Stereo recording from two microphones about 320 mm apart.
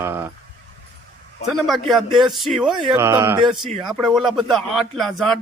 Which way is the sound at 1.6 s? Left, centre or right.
Centre.